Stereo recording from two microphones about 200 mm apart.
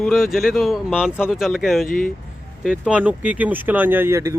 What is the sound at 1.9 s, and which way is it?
Speech, 45° left (ahead or behind).